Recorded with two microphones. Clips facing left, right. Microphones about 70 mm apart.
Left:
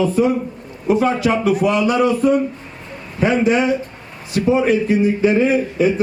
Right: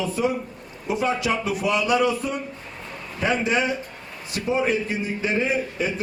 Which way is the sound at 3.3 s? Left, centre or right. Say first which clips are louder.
Left 7 dB; centre.